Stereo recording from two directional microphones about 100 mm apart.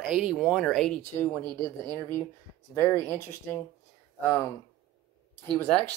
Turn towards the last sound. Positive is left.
turn(degrees=10)  # may be behind; listen again after turning